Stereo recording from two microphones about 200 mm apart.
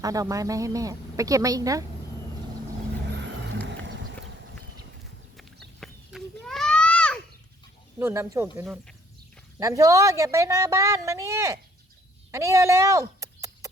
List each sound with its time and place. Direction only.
0.0 s a woman's voice: 15° right (ahead or behind)
3.1 s vehicle: 65° right (ahead or behind)
3.7 s clip-clop: 65° right (ahead or behind)
5.8 s a sound: centre (ahead or behind)
7.9 s a woman's voice: 10° right (ahead or behind)
8.6 s speech: centre (ahead or behind)
9.6 s a woman's voice: 15° right (ahead or behind)
12.3 s a sound: 15° right (ahead or behind)